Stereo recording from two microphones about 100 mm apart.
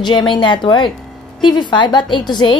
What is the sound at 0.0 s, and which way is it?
A woman's voice, 50° left (ahead or behind).